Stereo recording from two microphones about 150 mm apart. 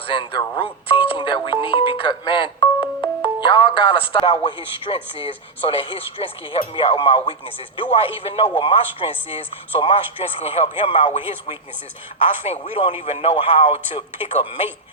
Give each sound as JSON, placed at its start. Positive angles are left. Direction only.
{"t": 0.1, "sound": "speech", "side_deg": 35}
{"t": 0.6, "sound": "music", "side_deg": 35}
{"t": 3.2, "sound": "speech", "side_deg": 35}
{"t": 12.5, "sound": "speech", "side_deg": 40}